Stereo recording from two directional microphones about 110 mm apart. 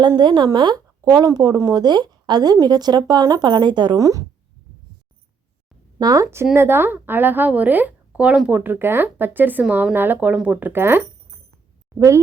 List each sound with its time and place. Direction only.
0.2 s speech: 45° right (ahead or behind)
1.0 s speech: 35° right (ahead or behind)
3.9 s speech: 30° right (ahead or behind)
6.0 s speech: 35° right (ahead or behind)